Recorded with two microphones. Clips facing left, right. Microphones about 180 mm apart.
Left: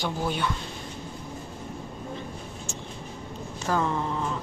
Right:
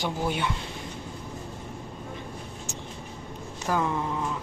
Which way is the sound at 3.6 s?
10° right (ahead or behind).